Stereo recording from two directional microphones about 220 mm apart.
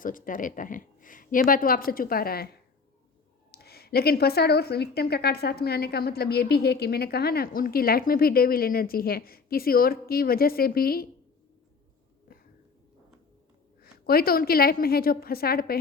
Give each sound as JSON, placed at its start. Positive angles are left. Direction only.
{"t": 0.0, "sound": "a woman's voice", "side_deg": 40}
{"t": 3.5, "sound": "a woman's voice", "side_deg": 45}
{"t": 13.8, "sound": "a woman's voice", "side_deg": 45}